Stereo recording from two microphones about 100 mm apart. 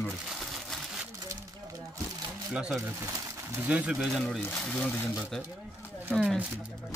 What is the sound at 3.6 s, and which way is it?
Speech, 10° right (ahead or behind).